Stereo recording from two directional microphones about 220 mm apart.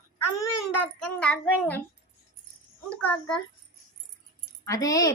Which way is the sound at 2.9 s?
5° left (ahead or behind).